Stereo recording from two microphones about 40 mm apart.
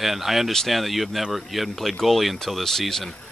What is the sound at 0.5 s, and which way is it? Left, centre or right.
Speech, centre.